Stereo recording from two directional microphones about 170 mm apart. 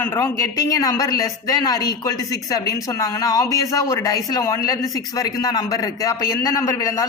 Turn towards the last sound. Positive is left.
turn(degrees=20)  # may be behind; listen again after turning